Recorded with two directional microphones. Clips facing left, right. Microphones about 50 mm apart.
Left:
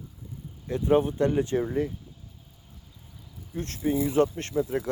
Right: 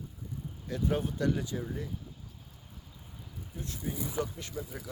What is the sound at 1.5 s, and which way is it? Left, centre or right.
Speech, left.